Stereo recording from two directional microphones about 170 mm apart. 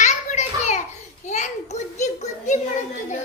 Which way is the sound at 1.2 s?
45° left (ahead or behind).